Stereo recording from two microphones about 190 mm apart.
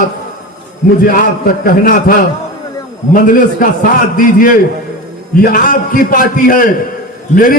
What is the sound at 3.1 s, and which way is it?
A man's voice, 45° left (ahead or behind).